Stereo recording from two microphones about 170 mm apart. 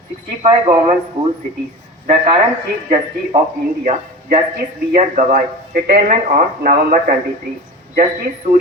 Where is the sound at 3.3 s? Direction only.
35° right (ahead or behind).